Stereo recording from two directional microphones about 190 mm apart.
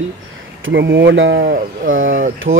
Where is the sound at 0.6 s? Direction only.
65° right (ahead or behind).